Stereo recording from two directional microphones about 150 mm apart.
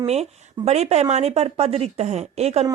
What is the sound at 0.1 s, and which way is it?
A woman's voice, 45° right (ahead or behind).